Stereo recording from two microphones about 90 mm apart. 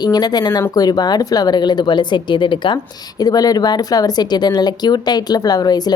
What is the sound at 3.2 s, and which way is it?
Speech, 45° left (ahead or behind).